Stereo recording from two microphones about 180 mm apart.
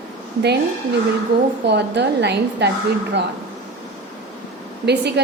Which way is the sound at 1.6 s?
70° right (ahead or behind).